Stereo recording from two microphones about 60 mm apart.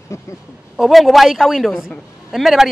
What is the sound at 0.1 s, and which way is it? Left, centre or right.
Speech, left.